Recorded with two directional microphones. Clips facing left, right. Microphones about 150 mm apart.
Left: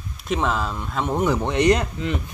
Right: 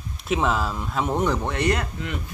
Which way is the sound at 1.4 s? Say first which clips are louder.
Left 5 dB; 20° left (ahead or behind).